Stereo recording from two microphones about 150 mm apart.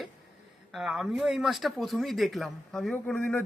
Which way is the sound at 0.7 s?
5° right (ahead or behind).